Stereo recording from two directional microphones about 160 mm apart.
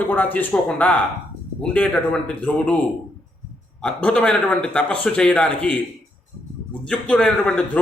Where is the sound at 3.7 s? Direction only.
5° left (ahead or behind).